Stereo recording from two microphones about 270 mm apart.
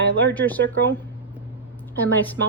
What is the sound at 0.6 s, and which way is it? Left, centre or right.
Speech, right.